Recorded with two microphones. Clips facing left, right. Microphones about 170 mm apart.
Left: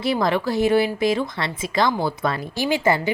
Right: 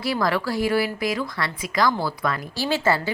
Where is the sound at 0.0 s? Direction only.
20° left (ahead or behind).